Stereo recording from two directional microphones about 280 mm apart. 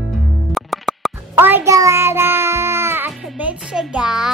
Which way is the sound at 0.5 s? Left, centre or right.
Centre.